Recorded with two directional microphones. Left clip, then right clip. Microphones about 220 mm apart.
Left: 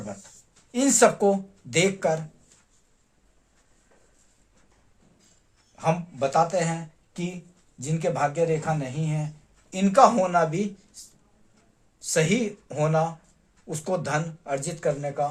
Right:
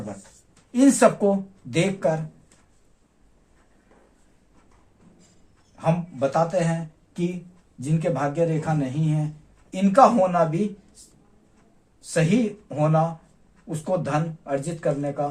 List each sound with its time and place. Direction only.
0.7 s a man's voice: 40° left (ahead or behind)
5.7 s a man's voice: 40° left (ahead or behind)
11.9 s a man's voice: 45° left (ahead or behind)